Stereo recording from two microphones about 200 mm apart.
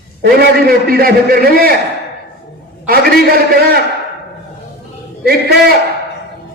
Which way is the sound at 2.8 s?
50° right (ahead or behind).